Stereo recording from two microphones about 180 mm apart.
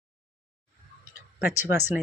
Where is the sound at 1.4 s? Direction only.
10° right (ahead or behind).